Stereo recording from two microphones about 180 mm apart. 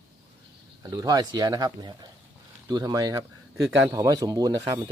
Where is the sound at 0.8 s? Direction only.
20° right (ahead or behind).